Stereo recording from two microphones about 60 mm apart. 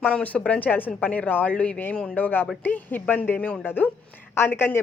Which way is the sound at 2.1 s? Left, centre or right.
Left.